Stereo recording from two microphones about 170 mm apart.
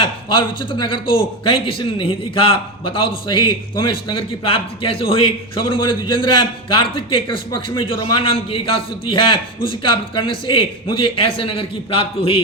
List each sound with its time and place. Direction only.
0.0 s a man's voice: 30° left (ahead or behind)